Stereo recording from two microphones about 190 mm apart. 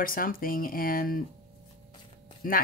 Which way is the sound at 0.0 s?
50° left (ahead or behind).